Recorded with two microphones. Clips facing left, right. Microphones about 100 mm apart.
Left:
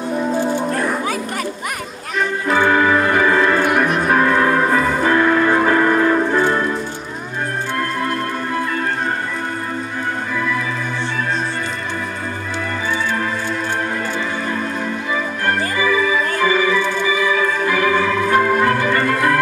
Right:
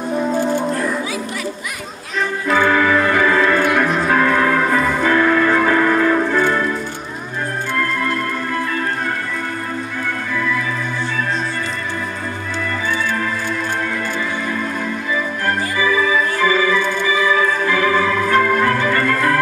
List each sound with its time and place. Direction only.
0.7 s music: 55° left (ahead or behind)
2.5 s music: 25° left (ahead or behind)
16.3 s music: 20° left (ahead or behind)
18.4 s organ: 25° left (ahead or behind)